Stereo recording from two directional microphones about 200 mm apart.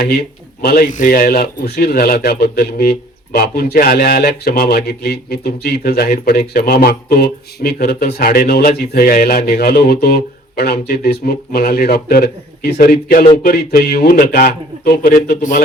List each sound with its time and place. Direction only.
0.0 s speech: 50° left (ahead or behind)